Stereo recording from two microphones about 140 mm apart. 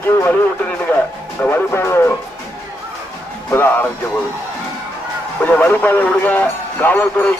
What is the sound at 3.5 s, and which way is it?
Speech, 15° left (ahead or behind).